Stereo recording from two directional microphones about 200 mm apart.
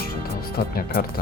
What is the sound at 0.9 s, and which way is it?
Speech, 45° left (ahead or behind).